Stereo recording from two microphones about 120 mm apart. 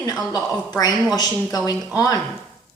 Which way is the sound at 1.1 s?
35° left (ahead or behind).